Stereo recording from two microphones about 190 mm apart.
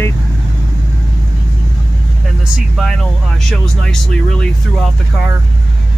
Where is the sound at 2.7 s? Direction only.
Centre (ahead or behind).